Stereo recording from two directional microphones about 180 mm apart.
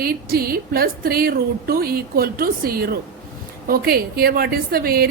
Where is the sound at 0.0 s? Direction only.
55° right (ahead or behind).